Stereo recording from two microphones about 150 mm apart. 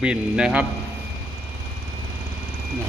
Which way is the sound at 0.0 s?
5° right (ahead or behind).